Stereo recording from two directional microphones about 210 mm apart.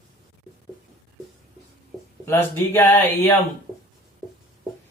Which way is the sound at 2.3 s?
10° left (ahead or behind).